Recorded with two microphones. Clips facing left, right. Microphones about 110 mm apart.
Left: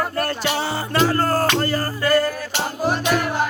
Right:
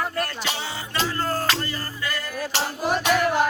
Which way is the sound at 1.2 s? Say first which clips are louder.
Left 6 dB; 40° left (ahead or behind).